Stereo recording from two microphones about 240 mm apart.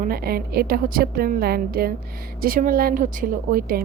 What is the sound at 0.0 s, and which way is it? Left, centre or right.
A woman's voice, right.